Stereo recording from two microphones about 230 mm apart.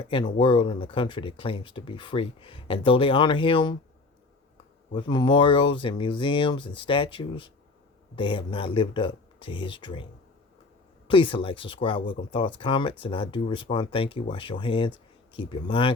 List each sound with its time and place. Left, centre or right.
0.1 s speech: left
4.9 s speech: centre
11.1 s speech: left